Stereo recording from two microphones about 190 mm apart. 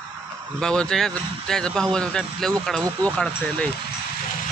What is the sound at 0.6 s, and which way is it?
Speech, 5° left (ahead or behind).